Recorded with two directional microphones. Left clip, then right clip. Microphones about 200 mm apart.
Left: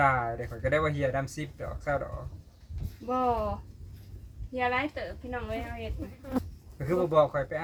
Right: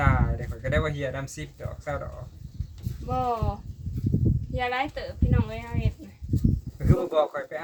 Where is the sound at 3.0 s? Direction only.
15° right (ahead or behind).